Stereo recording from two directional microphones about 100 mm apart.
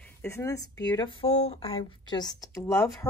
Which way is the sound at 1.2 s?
90° left.